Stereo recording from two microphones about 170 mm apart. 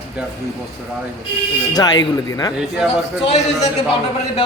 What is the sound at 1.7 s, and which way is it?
Speech, 25° left (ahead or behind).